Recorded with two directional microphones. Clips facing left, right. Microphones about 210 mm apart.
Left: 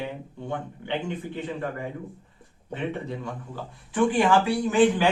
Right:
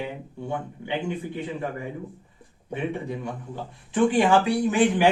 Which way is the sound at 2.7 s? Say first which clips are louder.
Right 2 dB; 15° right (ahead or behind).